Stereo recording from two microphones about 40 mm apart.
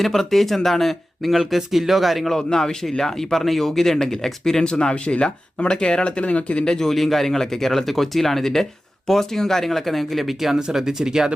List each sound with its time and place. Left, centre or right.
0.0 s speech: centre
2.3 s speech: centre
4.6 s speech: left
6.7 s speech: centre